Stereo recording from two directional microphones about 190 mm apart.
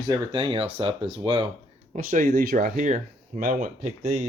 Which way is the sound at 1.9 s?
45° right (ahead or behind).